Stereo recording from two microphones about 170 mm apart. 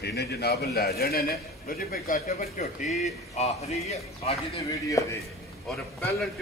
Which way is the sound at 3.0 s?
40° left (ahead or behind).